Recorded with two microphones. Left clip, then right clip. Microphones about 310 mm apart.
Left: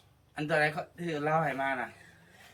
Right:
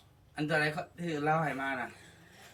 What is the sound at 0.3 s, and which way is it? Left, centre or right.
A woman's voice, centre.